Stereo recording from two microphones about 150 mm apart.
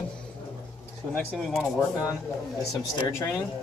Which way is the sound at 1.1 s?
5° left (ahead or behind).